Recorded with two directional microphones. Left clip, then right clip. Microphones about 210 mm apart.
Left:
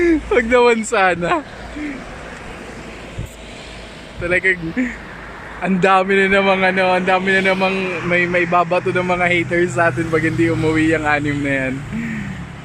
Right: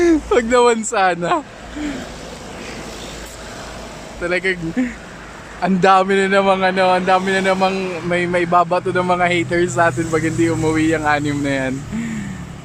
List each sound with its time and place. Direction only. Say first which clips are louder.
0.0 s a sound: right 1 dB; 10° right (ahead or behind)
0.9 s speech: left 1 dB; 5° right (ahead or behind)
4.2 s speech: left 3 dB; 5° right (ahead or behind)
7.8 s speech: left 2 dB; 55° right (ahead or behind)
8.1 s speech: even; 10° right (ahead or behind)